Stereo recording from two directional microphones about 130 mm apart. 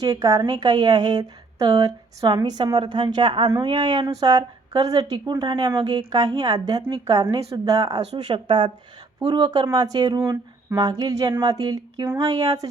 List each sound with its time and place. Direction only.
0.0 s a woman's voice: 30° right (ahead or behind)